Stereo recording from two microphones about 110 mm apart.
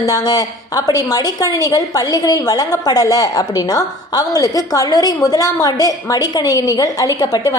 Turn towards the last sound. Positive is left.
turn(degrees=35)  # may be behind; listen again after turning